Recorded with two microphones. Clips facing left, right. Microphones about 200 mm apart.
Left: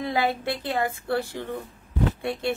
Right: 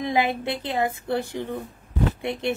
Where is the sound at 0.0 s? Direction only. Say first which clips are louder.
Right 2 dB; 20° right (ahead or behind).